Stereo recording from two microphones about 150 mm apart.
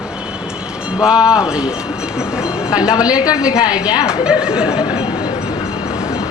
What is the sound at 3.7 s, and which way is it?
A woman's voice, 5° right (ahead or behind).